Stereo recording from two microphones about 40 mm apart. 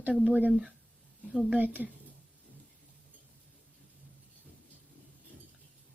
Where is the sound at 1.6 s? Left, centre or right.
Right.